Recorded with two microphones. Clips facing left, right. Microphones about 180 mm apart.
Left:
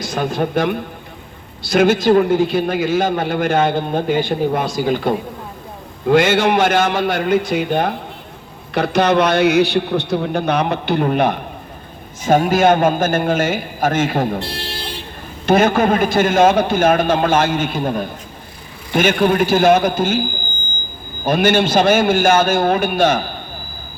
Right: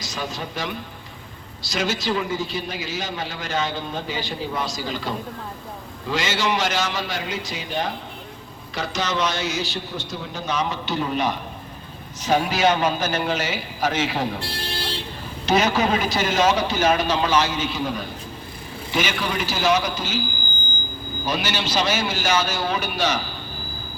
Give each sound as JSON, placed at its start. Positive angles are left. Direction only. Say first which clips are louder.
{"t": 0.0, "sound": "a man's voice", "louder": "left 11 dB", "side_deg": 55}
{"t": 15.4, "sound": "a man's voice", "louder": "left 6 dB", "side_deg": 55}